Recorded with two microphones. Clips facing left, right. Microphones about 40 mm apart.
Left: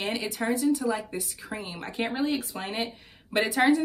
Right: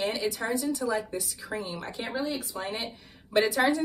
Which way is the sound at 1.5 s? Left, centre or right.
Left.